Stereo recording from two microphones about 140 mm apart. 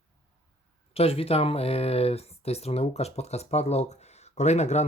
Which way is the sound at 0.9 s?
45° left (ahead or behind).